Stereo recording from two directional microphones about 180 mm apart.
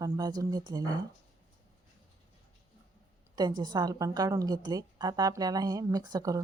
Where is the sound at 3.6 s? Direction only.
25° right (ahead or behind).